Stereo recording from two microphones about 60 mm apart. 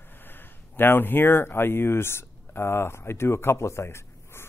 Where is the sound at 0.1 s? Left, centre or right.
Left.